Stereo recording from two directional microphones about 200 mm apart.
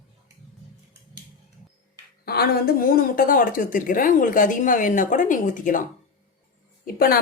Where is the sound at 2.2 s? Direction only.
50° left (ahead or behind).